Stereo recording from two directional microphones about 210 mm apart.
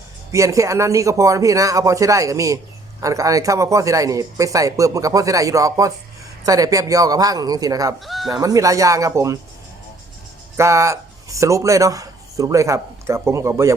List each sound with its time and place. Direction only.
0.3 s speech: 15° right (ahead or behind)
7.9 s speech: centre (ahead or behind)
8.3 s speech: 15° right (ahead or behind)
10.6 s speech: 15° right (ahead or behind)